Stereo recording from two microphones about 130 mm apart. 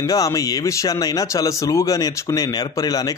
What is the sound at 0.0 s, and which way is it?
Speech, 25° left (ahead or behind).